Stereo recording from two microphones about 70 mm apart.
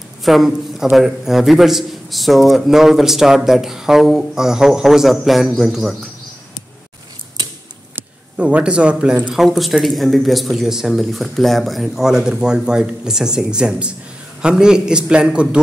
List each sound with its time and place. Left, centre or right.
0.2 s a man's voice: centre
8.4 s a man's voice: centre
9.3 s a man's voice: centre